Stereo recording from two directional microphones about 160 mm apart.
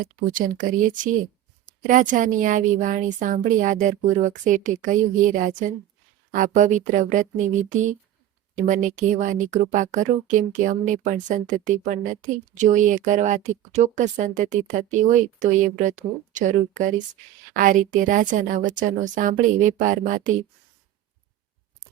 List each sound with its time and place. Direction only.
0.0 s a woman's voice: 60° right (ahead or behind)
8.6 s a woman's voice: 55° right (ahead or behind)